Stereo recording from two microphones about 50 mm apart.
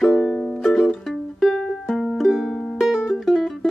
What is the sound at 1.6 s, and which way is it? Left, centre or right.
Music, centre.